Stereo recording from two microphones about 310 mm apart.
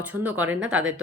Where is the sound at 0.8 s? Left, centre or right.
Right.